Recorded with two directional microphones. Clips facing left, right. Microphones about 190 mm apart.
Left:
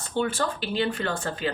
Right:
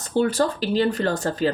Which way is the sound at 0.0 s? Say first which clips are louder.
Right 6 dB; 40° right (ahead or behind).